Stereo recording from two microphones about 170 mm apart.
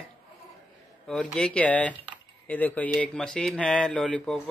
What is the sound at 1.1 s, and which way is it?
A man's voice, 5° left (ahead or behind).